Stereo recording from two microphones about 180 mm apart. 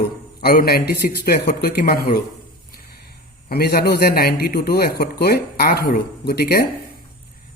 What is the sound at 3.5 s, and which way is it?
A man's voice, 60° left (ahead or behind).